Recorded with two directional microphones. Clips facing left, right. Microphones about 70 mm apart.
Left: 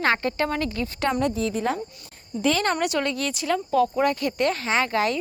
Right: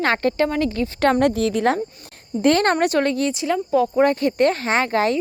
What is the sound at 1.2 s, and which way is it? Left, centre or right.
Speech, right.